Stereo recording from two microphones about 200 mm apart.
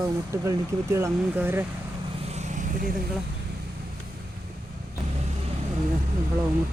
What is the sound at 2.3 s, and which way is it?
Vehicle, 35° right (ahead or behind).